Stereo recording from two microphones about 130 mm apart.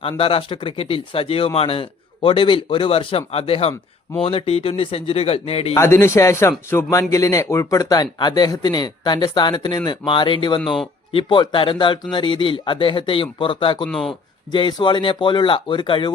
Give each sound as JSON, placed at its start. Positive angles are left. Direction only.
{"t": 0.2, "sound": "a man's voice", "side_deg": 45}
{"t": 5.7, "sound": "speech", "side_deg": 20}
{"t": 13.8, "sound": "speech", "side_deg": 5}
{"t": 14.1, "sound": "speech", "side_deg": 40}